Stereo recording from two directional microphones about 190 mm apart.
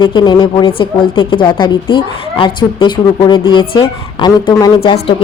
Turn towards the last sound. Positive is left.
turn(degrees=30)  # may be behind; listen again after turning